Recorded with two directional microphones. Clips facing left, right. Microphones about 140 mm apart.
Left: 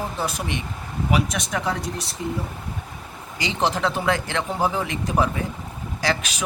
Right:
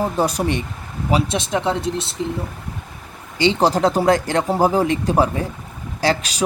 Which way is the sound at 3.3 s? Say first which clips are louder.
Right 7 dB; 30° right (ahead or behind).